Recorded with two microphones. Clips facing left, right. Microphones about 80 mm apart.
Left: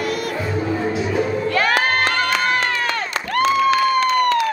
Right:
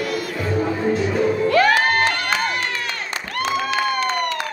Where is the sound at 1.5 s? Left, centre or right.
Left.